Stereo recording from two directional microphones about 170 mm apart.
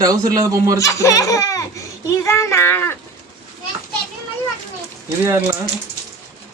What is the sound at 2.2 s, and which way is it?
Speech, 15° left (ahead or behind).